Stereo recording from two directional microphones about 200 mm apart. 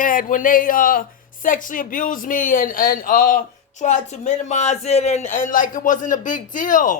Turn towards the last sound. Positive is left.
turn(degrees=40)  # may be behind; listen again after turning